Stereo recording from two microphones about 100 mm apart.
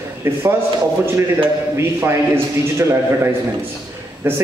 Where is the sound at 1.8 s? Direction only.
25° right (ahead or behind).